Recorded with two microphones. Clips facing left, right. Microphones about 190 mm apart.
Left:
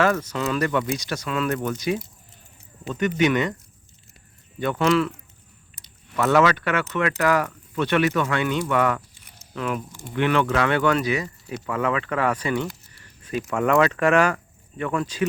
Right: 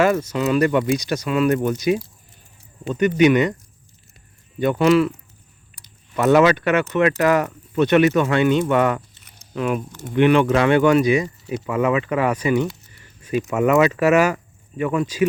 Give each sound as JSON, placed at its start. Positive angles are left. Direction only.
{"t": 0.0, "sound": "speech", "side_deg": -10}
{"t": 4.6, "sound": "speech", "side_deg": -15}
{"t": 6.1, "sound": "speech", "side_deg": -20}
{"t": 9.4, "sound": "a sound", "side_deg": -20}
{"t": 10.2, "sound": "speech", "side_deg": -20}